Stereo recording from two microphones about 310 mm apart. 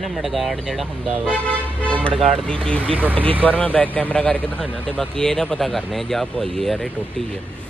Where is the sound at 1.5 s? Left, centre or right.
Centre.